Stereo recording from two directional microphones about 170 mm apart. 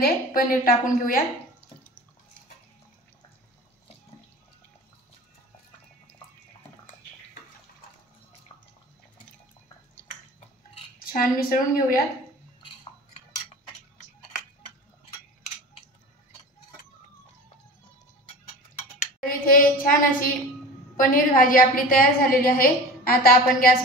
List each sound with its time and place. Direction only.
0.0 s a woman's voice: 55° left (ahead or behind)
11.1 s a woman's voice: 55° left (ahead or behind)
18.9 s a woman's voice: 55° left (ahead or behind)